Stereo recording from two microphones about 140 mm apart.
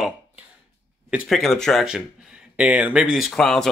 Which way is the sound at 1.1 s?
Centre (ahead or behind).